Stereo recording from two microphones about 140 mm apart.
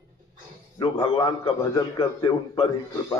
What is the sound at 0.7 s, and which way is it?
Speech, 35° left (ahead or behind).